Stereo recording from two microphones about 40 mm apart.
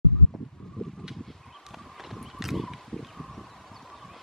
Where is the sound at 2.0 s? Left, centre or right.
Centre.